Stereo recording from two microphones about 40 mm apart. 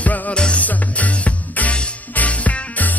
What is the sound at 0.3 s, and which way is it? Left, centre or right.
Music, left.